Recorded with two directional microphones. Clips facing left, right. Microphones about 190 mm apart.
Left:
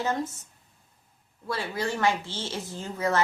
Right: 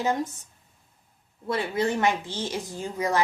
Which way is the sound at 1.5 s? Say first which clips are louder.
Right 4 dB; 20° right (ahead or behind).